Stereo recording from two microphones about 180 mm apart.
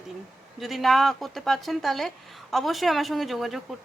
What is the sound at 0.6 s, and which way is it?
Speech, centre (ahead or behind).